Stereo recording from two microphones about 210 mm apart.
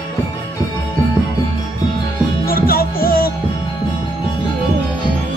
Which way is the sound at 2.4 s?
45° left (ahead or behind).